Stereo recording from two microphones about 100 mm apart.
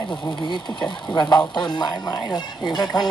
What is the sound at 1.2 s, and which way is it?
Speech, 45° left (ahead or behind).